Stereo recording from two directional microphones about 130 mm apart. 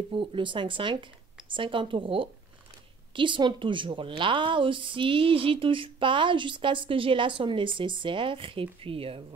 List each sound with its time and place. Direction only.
0.1 s a woman's voice: 40° right (ahead or behind)